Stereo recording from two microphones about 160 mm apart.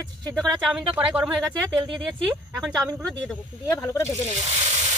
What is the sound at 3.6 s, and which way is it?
Speech, 15° left (ahead or behind).